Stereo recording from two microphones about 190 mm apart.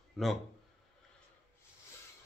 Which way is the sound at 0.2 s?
Centre (ahead or behind).